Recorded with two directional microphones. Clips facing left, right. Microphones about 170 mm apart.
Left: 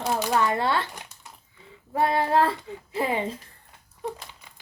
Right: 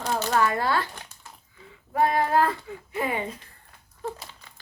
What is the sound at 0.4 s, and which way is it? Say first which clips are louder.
Speech: even; 25° left (ahead or behind).